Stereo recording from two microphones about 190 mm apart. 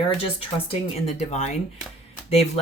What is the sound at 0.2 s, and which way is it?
Speech, 30° left (ahead or behind).